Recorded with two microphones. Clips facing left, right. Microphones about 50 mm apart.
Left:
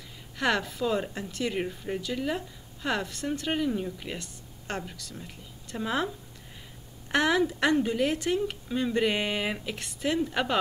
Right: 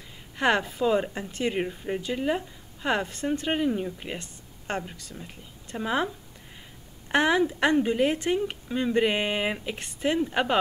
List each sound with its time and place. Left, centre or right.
0.4 s speech: right
7.1 s speech: centre